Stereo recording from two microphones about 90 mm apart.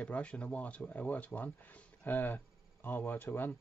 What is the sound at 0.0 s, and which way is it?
Speech, 15° left (ahead or behind).